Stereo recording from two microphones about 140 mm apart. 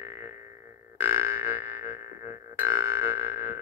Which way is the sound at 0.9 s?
15° right (ahead or behind).